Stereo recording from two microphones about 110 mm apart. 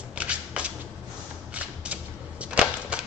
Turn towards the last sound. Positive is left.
turn(degrees=-10)  # may be behind; listen again after turning